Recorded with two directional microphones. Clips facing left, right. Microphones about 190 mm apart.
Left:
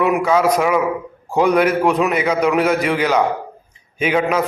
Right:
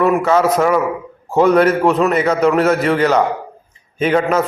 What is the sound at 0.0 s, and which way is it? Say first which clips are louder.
A man's voice: right 2 dB; 10° left (ahead or behind).